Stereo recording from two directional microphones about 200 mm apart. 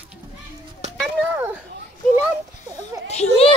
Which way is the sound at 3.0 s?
30° left (ahead or behind).